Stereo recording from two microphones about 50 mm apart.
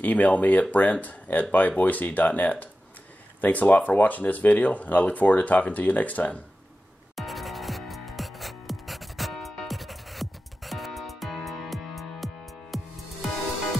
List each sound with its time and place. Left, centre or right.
0.0 s speech: left
7.2 s music: centre